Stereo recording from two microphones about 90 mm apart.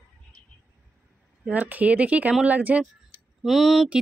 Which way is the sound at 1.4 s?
15° right (ahead or behind).